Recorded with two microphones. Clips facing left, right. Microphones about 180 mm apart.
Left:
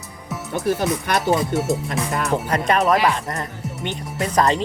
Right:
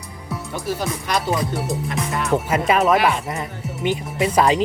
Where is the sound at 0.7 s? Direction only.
55° left (ahead or behind).